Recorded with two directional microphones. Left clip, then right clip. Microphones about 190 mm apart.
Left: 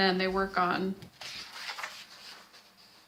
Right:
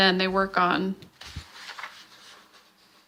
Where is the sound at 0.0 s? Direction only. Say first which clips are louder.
Right 6 dB; 40° right (ahead or behind).